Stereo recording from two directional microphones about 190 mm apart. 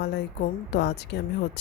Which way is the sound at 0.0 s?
60° left (ahead or behind).